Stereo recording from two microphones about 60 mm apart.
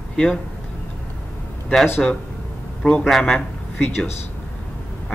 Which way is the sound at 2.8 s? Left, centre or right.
Centre.